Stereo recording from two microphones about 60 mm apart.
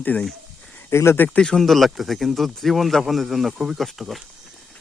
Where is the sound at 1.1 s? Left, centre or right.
Left.